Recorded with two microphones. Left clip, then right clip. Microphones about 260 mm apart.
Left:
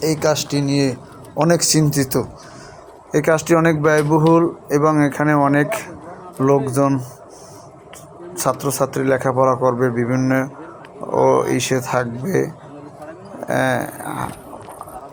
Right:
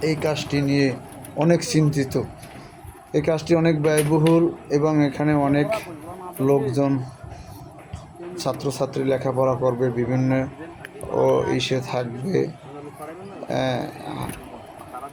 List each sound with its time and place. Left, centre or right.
0.0 s speech: centre
8.4 s speech: centre
13.5 s speech: centre